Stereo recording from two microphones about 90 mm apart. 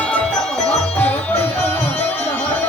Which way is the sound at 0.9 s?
20° left (ahead or behind).